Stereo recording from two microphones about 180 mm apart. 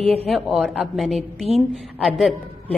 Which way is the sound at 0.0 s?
35° right (ahead or behind).